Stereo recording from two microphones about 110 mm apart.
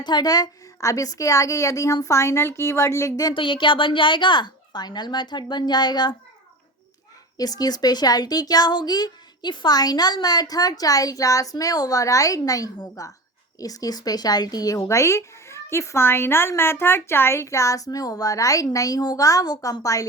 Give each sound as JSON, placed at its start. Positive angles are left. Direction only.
{"t": 0.0, "sound": "a woman's voice", "side_deg": 40}
{"t": 3.3, "sound": "a woman's voice", "side_deg": 50}
{"t": 7.3, "sound": "speech", "side_deg": 35}